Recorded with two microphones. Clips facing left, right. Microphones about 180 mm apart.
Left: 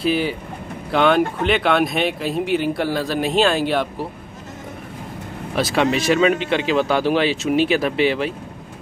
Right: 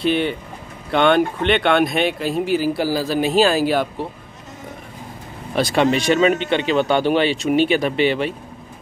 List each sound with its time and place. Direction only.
0.0 s speech: 5° left (ahead or behind)
5.6 s speech: centre (ahead or behind)